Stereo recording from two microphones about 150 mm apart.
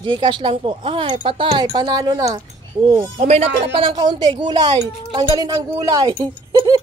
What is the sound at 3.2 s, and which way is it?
Speech, 45° right (ahead or behind).